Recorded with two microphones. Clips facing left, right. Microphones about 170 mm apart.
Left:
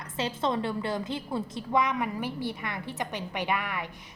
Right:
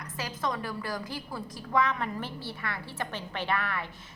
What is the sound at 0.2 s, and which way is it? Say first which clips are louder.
A woman's voice: left 5 dB; 25° left (ahead or behind).